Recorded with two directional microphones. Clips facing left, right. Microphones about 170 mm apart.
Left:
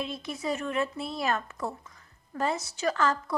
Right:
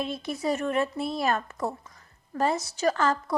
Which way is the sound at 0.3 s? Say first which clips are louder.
Right 5 dB; 45° right (ahead or behind).